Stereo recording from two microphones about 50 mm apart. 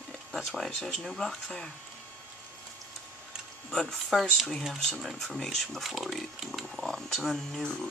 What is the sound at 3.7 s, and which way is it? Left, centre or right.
Speech, centre.